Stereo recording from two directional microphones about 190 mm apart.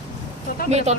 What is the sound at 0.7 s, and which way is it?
Speech, 35° right (ahead or behind).